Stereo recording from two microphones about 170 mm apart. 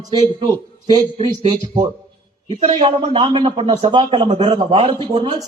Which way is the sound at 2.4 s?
40° right (ahead or behind).